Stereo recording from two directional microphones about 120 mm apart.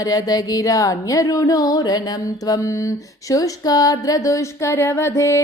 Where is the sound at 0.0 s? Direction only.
30° left (ahead or behind).